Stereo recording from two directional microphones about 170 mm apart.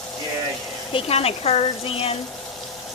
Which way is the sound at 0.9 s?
35° left (ahead or behind).